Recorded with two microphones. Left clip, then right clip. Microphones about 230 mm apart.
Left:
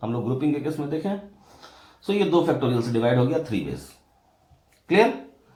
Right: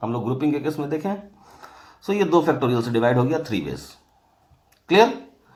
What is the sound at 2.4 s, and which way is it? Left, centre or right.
Speech, right.